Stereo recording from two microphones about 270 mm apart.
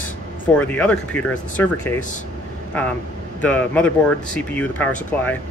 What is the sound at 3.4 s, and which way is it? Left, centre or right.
Speech, centre.